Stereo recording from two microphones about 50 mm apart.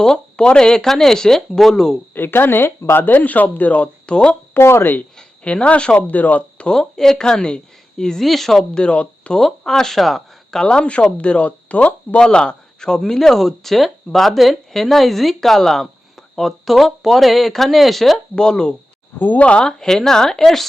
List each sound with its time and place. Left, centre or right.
0.0 s speech: centre
2.1 s speech: left
3.1 s speech: left
4.5 s speech: left
5.1 s speech: centre
6.7 s speech: centre
8.7 s speech: left
9.4 s speech: centre
10.6 s speech: centre
12.2 s a man's voice: centre
18.3 s speech: centre
19.2 s speech: left
19.5 s speech: centre